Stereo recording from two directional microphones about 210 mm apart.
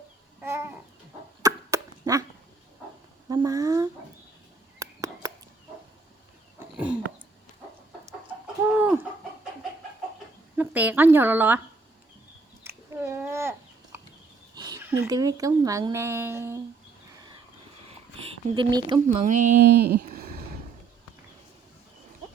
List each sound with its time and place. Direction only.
0.4 s babbling: 10° right (ahead or behind)
1.4 s dog: 15° right (ahead or behind)
3.2 s a sound: 15° right (ahead or behind)
6.6 s a sound: 5° right (ahead or behind)
8.6 s chicken: 5° right (ahead or behind)
10.6 s speech: 10° right (ahead or behind)
12.6 s a sound: 10° right (ahead or behind)
14.5 s speech: 20° right (ahead or behind)
17.8 s sniff: 25° right (ahead or behind)
19.0 s speech: 35° right (ahead or behind)